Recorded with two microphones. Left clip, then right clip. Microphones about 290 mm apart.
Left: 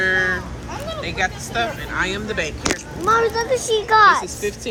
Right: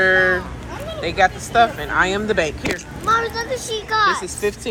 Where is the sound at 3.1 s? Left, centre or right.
Left.